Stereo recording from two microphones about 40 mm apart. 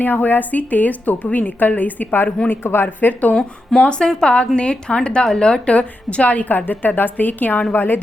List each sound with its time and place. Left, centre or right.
0.0 s a woman's voice: left
2.5 s a woman's voice: left
3.8 s a woman's voice: left
6.7 s a woman's voice: left